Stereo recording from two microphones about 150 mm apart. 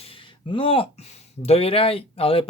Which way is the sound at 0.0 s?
35° left (ahead or behind).